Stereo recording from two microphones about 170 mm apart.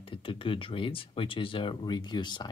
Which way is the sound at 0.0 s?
30° left (ahead or behind).